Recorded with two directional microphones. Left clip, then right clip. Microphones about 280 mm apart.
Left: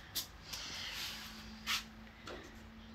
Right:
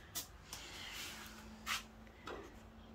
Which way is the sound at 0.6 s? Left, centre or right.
Centre.